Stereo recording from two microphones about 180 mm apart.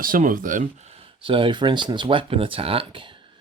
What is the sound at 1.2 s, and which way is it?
Speech, 30° right (ahead or behind).